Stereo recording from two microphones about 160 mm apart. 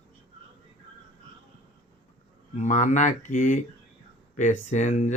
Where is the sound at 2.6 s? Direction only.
50° left (ahead or behind).